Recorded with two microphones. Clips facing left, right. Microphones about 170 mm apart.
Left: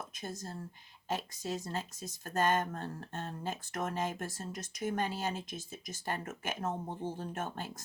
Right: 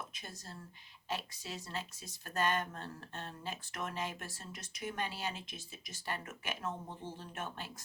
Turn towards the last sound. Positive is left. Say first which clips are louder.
# left 5 dB
turn(degrees=45)  # may be behind; listen again after turning